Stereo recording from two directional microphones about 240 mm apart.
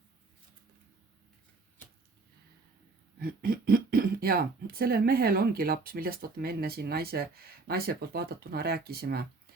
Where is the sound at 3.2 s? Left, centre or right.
Right.